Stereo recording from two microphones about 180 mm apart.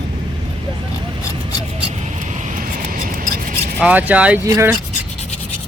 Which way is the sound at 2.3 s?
45° right (ahead or behind).